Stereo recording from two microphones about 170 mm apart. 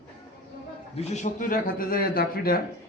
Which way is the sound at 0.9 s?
40° left (ahead or behind).